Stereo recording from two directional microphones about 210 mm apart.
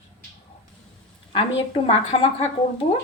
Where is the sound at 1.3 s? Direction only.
25° left (ahead or behind).